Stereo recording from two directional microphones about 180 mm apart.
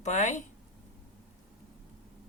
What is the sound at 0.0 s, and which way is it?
Speech, 40° left (ahead or behind).